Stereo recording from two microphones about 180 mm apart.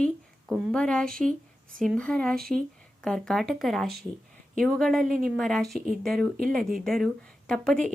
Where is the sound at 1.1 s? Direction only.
45° right (ahead or behind).